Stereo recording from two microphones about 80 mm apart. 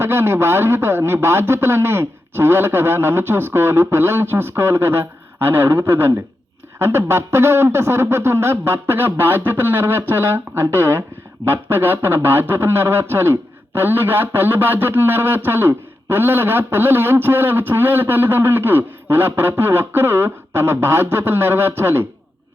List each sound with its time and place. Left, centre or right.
0.0 s speech: right